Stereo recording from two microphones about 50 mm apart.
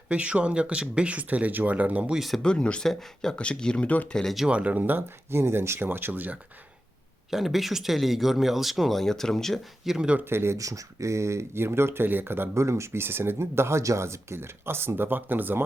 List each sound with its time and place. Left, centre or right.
0.1 s speech: right
2.4 s speech: centre
3.8 s speech: left
4.1 s speech: centre
4.4 s speech: right
7.3 s speech: centre
9.0 s speech: centre
9.8 s speech: centre
10.2 s speech: right
12.5 s speech: right
13.0 s speech: right